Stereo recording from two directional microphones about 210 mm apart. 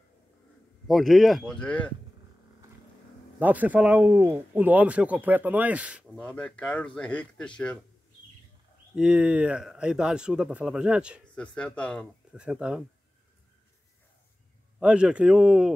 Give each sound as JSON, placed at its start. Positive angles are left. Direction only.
{"t": 0.8, "sound": "speech", "side_deg": 0}
{"t": 3.3, "sound": "speech", "side_deg": -10}
{"t": 6.2, "sound": "speech", "side_deg": 5}
{"t": 8.9, "sound": "speech", "side_deg": -5}
{"t": 14.8, "sound": "speech", "side_deg": -5}